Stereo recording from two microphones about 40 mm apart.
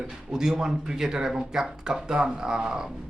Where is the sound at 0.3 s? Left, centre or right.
Centre.